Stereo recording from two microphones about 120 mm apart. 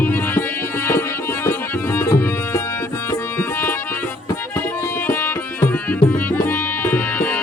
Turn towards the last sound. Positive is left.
turn(degrees=10)  # may be behind; listen again after turning